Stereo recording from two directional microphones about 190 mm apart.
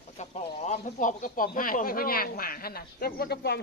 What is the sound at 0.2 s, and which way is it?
Speech, 35° left (ahead or behind).